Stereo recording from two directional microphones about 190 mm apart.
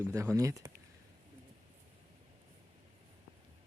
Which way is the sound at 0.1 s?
15° right (ahead or behind).